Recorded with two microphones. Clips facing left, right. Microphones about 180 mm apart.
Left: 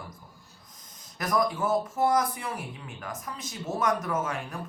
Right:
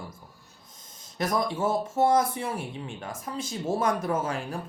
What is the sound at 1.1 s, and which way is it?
Speech, 25° right (ahead or behind).